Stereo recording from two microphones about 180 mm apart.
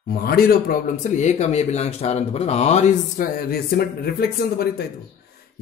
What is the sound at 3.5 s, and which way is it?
Speech, 60° left (ahead or behind).